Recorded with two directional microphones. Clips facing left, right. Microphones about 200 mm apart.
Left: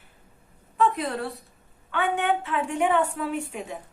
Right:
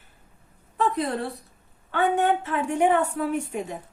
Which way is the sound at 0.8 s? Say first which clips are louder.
Even; 35° right (ahead or behind).